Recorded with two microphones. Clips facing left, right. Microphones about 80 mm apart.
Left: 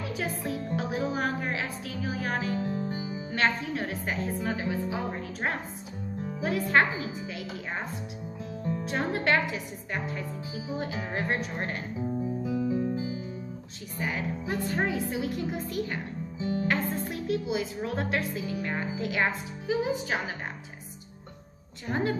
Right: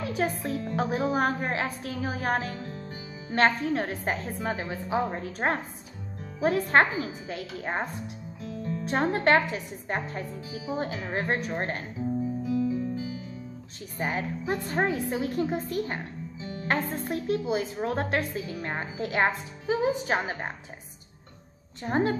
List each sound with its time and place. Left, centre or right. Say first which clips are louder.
0.2 s a woman's voice: right 4 dB; right
0.7 s music: right 5 dB; right
2.5 s music: left 7 dB; left
3.3 s a woman's voice: right 5 dB; right
8.5 s music: even; left
8.8 s a woman's voice: right 5 dB; right
12.4 s music: even; left
13.9 s a woman's voice: right 2 dB; right
16.3 s music: left 10 dB; left
16.6 s a woman's voice: right 5 dB; right
21.8 s a woman's voice: right 3 dB; right